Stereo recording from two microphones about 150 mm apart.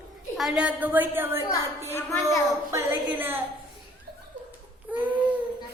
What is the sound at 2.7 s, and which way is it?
Speech, 15° right (ahead or behind).